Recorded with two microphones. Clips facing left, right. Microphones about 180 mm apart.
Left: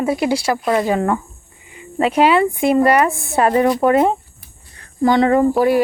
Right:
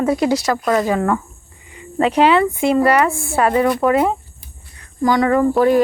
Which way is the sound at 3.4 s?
35° left (ahead or behind).